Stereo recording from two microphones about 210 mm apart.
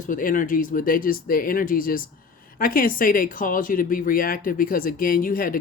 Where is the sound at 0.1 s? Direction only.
40° left (ahead or behind).